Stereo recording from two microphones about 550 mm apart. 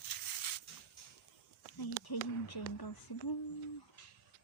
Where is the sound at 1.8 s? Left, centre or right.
Left.